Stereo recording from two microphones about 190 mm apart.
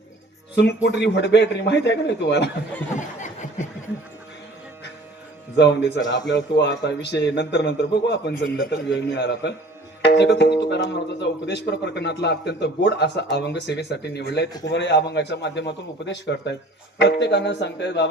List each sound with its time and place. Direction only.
0.5 s speech: 65° left (ahead or behind)
3.0 s snicker: 40° left (ahead or behind)
5.5 s speech: 65° left (ahead or behind)